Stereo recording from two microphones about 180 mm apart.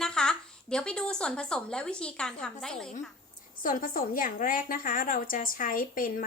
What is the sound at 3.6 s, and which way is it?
A woman's voice, 50° left (ahead or behind).